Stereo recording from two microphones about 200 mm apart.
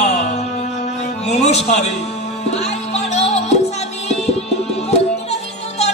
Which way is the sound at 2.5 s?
35° left (ahead or behind).